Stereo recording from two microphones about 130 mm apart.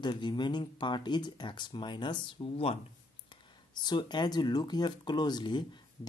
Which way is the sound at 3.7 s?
35° left (ahead or behind).